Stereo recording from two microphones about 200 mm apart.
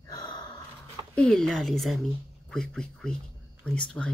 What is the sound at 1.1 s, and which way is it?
Speech, 5° left (ahead or behind).